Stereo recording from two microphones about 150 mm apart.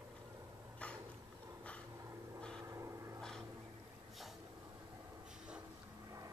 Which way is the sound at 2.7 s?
20° right (ahead or behind).